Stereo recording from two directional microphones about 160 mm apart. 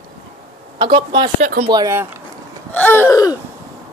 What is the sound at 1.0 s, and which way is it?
Speech, 30° right (ahead or behind).